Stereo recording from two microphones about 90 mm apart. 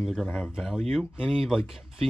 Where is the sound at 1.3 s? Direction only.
Centre (ahead or behind).